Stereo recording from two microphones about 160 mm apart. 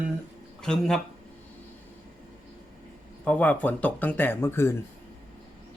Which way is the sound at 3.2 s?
10° left (ahead or behind).